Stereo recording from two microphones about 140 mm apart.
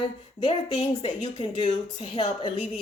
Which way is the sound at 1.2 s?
35° left (ahead or behind).